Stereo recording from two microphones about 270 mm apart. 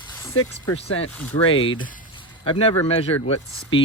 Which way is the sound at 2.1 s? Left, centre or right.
Centre.